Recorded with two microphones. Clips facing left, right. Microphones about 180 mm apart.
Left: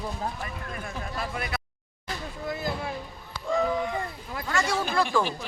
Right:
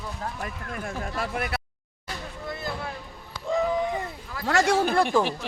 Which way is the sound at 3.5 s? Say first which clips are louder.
Right 1 dB; 20° right (ahead or behind).